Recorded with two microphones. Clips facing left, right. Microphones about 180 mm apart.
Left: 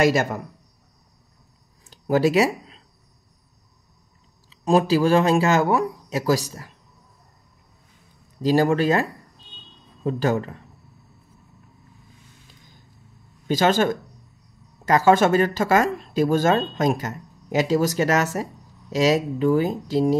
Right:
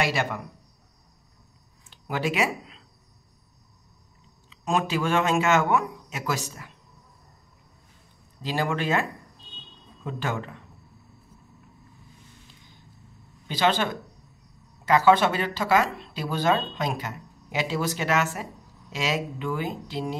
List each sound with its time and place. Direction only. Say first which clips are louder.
0.0 s speech: left 7 dB; 40° left (ahead or behind)
1.9 s a sound: left 9 dB; 40° left (ahead or behind)
4.5 s speech: left 8 dB; 35° left (ahead or behind)
8.4 s speech: left 9 dB; 40° left (ahead or behind)
10.0 s speech: left 9 dB; 40° left (ahead or behind)
13.5 s speech: left 5 dB; 45° left (ahead or behind)